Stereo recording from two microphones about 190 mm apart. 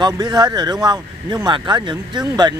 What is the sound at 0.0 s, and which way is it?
Speech, 20° right (ahead or behind).